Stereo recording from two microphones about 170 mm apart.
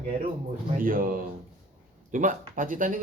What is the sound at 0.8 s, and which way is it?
Speech, 55° right (ahead or behind).